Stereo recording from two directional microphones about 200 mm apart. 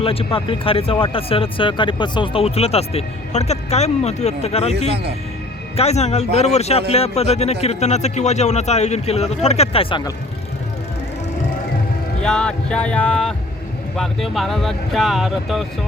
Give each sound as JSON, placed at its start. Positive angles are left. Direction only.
{"t": 0.0, "sound": "a man's voice", "side_deg": 30}
{"t": 12.2, "sound": "speech", "side_deg": 5}